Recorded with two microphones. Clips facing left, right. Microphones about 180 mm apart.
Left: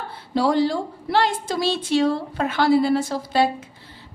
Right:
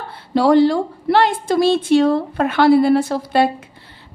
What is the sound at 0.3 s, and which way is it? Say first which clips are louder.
A woman's voice: right 7 dB; 65° right (ahead or behind).